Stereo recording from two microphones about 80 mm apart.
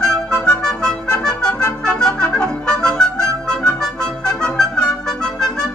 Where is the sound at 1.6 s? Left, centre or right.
Centre.